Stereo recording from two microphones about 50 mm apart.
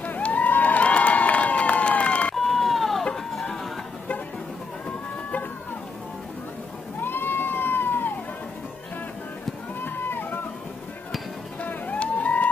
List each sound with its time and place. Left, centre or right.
0.0 s a sound: left
0.5 s crowd: left
2.3 s a sound: centre
7.0 s cat: left
9.8 s music: left
11.6 s music: left